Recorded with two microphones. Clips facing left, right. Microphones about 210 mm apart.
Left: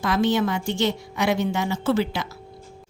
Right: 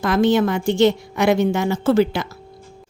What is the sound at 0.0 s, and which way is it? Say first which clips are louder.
Speech: right 5 dB; 50° right (ahead or behind).